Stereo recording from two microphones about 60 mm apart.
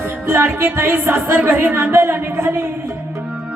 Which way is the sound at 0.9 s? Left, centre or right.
Right.